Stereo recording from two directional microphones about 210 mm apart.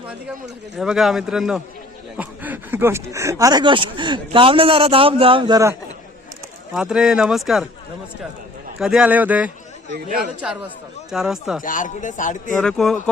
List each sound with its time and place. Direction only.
0.8 s speech: centre (ahead or behind); by 5.7 s 20° right (ahead or behind)
6.7 s speech: 5° right (ahead or behind)
8.8 s speech: 5° right (ahead or behind)
9.9 s a man's voice: 40° right (ahead or behind)
11.1 s speech: centre (ahead or behind)
11.6 s speech: 40° left (ahead or behind)
12.5 s speech: centre (ahead or behind)